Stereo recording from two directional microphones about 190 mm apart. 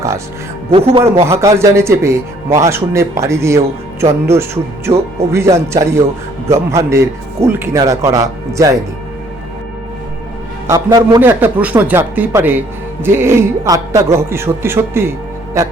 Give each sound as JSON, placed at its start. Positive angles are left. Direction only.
{"t": 0.7, "sound": "speech", "side_deg": -30}
{"t": 1.2, "sound": "a man's voice", "side_deg": -15}
{"t": 4.9, "sound": "speech", "side_deg": -30}
{"t": 5.3, "sound": "a man's voice", "side_deg": -15}
{"t": 10.7, "sound": "a man's voice", "side_deg": -20}